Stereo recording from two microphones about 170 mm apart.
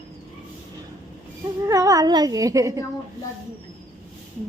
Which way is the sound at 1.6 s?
20° right (ahead or behind).